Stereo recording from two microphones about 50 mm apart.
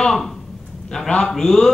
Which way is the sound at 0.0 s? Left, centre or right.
Centre.